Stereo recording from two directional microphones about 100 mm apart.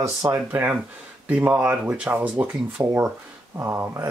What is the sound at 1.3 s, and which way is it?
Speech, 15° right (ahead or behind).